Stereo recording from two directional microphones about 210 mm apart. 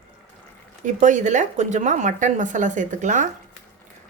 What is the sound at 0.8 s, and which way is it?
A woman's voice, 35° right (ahead or behind).